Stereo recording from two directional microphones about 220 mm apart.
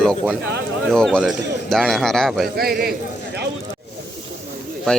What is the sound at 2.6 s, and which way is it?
Speech, 45° right (ahead or behind).